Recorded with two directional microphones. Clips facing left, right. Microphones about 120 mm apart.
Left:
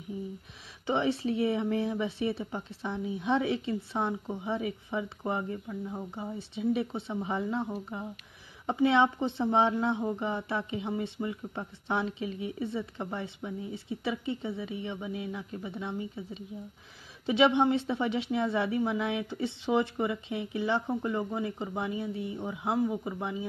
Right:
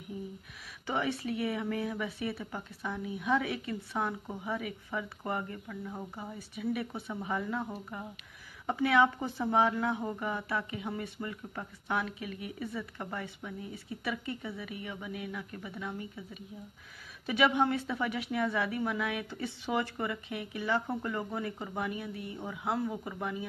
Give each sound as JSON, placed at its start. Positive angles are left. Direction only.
{"t": 0.8, "sound": "speech", "side_deg": 25}